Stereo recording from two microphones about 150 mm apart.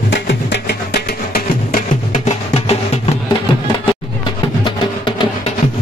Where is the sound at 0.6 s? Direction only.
90° left.